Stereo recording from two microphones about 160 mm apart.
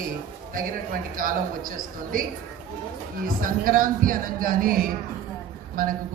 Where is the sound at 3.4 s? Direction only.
60° right (ahead or behind).